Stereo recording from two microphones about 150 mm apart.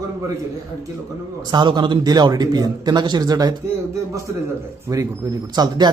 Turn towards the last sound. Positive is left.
turn(degrees=-30)  # may be behind; listen again after turning